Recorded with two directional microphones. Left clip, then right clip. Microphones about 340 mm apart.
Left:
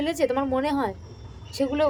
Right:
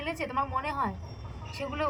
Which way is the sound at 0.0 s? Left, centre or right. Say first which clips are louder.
Left 7 dB; centre.